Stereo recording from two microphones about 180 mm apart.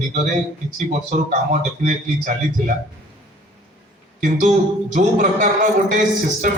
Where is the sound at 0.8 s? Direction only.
40° right (ahead or behind).